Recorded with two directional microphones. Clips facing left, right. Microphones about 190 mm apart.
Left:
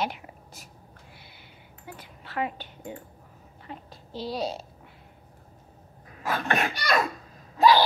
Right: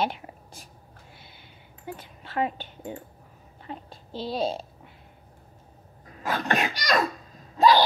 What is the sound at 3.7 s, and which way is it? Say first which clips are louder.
Speech: right 2 dB; 25° right (ahead or behind).